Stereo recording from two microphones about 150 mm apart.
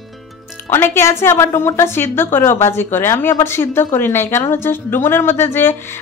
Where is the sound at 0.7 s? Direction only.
15° left (ahead or behind).